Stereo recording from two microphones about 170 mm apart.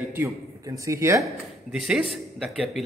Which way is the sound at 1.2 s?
5° right (ahead or behind).